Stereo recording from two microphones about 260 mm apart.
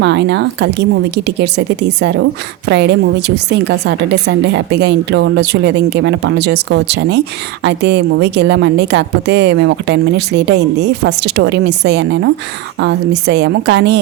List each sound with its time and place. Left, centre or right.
0.0 s a woman's voice: right